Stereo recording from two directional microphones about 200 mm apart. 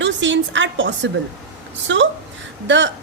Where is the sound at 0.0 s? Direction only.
65° right (ahead or behind).